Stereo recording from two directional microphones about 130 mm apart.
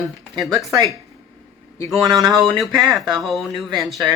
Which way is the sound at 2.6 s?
Centre (ahead or behind).